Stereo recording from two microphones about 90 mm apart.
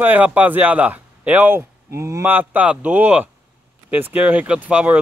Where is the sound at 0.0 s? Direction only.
20° right (ahead or behind).